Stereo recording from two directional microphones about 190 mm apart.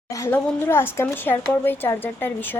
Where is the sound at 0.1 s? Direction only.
15° left (ahead or behind).